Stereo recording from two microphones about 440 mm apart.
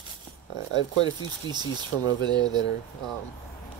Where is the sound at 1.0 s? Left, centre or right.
Centre.